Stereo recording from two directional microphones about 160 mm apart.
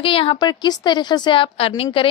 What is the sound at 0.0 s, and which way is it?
A woman's voice, 35° left (ahead or behind).